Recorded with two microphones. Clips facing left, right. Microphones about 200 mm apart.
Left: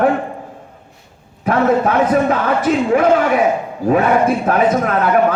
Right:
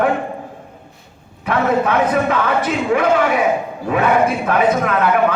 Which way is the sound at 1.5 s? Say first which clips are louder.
Left 2 dB; 40° left (ahead or behind).